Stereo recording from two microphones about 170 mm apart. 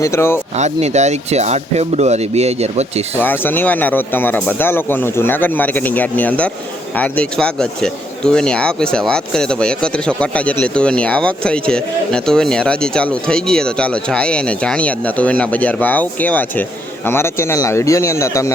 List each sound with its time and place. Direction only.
0.0 s speech: 15° left (ahead or behind)
0.5 s speech: 40° right (ahead or behind)
3.2 s speech: 10° left (ahead or behind)